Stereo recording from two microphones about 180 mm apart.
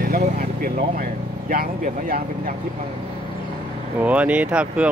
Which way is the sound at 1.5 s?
55° right (ahead or behind).